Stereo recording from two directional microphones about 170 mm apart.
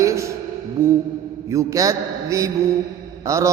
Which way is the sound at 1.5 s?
20° right (ahead or behind).